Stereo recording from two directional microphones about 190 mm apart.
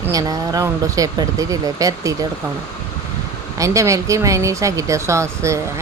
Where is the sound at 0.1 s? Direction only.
20° right (ahead or behind).